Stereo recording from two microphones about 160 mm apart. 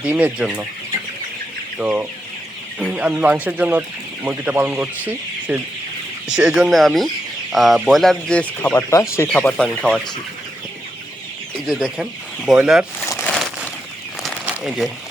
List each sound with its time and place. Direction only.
0.0 s speech: 10° right (ahead or behind)
1.8 s speech: 10° right (ahead or behind)
11.6 s speech: 5° right (ahead or behind)
13.1 s crumpling: 15° left (ahead or behind)
14.4 s a sound: 5° right (ahead or behind)